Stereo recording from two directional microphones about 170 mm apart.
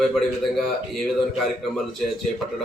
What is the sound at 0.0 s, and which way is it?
A man's voice, centre (ahead or behind).